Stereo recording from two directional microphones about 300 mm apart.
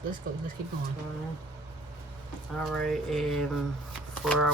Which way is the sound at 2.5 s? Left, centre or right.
Centre.